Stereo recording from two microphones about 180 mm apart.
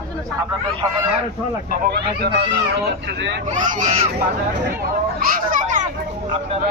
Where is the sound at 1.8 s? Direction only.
65° right (ahead or behind).